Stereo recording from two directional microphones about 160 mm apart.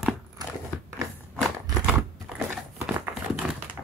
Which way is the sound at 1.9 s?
Centre (ahead or behind).